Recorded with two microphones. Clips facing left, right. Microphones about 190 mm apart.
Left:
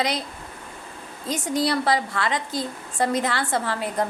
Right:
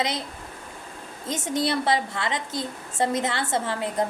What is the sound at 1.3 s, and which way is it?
A woman's voice, 25° right (ahead or behind).